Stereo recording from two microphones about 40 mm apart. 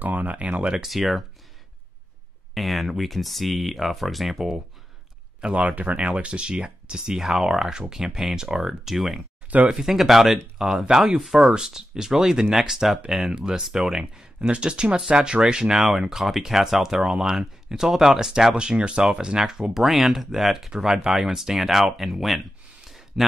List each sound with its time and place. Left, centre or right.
0.0 s speech: right
0.8 s speech: centre
2.5 s speech: centre
5.9 s speech: right
7.1 s speech: centre
9.7 s speech: centre
9.9 s speech: centre
14.5 s speech: right
18.6 s speech: right; by 20.7 s centre
20.7 s speech: centre
22.8 s a sound: centre